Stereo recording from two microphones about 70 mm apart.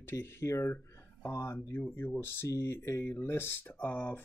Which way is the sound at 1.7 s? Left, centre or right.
Left.